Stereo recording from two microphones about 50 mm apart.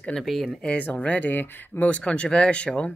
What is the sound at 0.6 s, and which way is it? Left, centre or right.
Speech, left.